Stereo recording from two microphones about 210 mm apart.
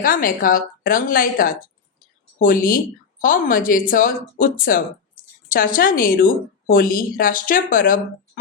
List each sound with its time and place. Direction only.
0.0 s a woman's voice: 40° left (ahead or behind)